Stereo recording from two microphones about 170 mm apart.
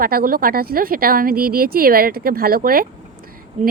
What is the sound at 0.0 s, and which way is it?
Speech, 60° right (ahead or behind).